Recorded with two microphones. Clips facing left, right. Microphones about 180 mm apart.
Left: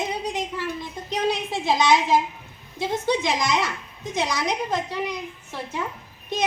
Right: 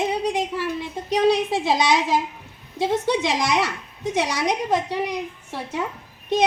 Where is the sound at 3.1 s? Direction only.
80° right.